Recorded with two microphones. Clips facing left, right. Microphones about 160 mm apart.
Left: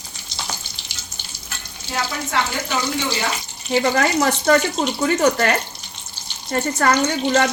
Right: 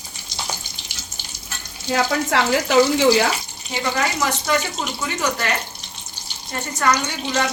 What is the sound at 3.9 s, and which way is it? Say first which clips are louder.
Speech: left 4 dB; 45° left (ahead or behind).